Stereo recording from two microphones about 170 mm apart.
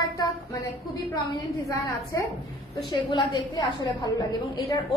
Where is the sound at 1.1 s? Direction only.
25° left (ahead or behind).